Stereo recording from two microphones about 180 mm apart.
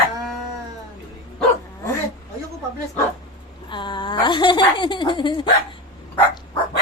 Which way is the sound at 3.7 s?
25° left (ahead or behind).